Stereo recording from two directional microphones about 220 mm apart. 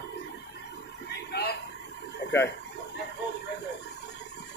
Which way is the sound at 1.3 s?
45° left (ahead or behind).